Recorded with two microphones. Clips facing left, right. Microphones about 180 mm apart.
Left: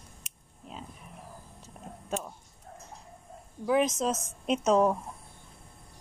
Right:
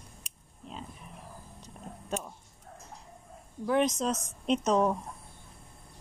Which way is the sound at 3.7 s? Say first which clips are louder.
Left 1 dB; 5° left (ahead or behind).